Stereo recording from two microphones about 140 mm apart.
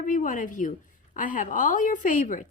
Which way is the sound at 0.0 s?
65° left (ahead or behind).